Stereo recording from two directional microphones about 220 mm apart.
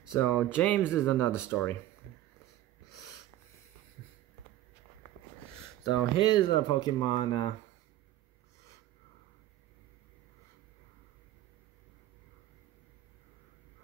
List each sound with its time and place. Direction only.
0.1 s speech: 10° left (ahead or behind)
6.1 s speech: 20° left (ahead or behind)